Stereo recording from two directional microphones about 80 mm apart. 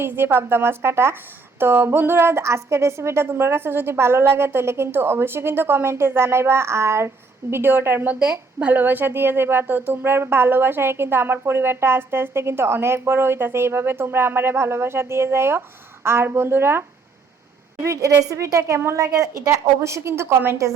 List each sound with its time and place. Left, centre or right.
0.0 s a woman's voice: right
8.1 s a woman's voice: centre; by 16.8 s right
17.8 s a woman's voice: right